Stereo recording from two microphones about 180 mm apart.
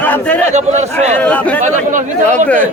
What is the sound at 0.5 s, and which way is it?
Speech, 40° right (ahead or behind).